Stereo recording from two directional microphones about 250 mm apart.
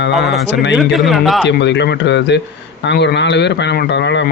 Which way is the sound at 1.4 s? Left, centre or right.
Left.